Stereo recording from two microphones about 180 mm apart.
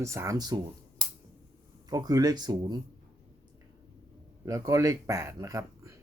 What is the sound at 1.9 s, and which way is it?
Speech, 20° right (ahead or behind).